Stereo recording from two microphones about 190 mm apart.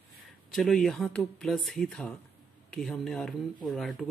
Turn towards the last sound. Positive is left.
turn(degrees=0)  # may be behind; listen again after turning